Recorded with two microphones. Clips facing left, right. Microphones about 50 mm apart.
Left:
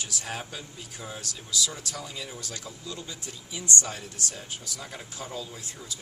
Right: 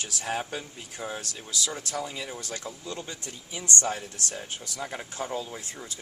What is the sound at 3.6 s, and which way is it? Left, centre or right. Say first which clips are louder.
Speech: right 2 dB; right.